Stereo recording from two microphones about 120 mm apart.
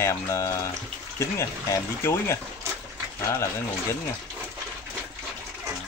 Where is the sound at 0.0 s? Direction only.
25° left (ahead or behind).